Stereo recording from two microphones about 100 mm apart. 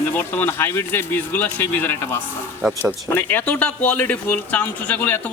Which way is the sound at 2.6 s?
15° right (ahead or behind).